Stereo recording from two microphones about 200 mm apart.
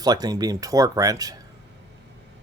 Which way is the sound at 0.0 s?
20° right (ahead or behind).